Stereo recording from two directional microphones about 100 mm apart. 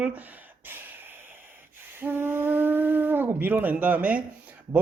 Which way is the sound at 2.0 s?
20° right (ahead or behind).